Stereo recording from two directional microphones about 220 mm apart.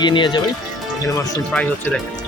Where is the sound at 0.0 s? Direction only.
20° left (ahead or behind).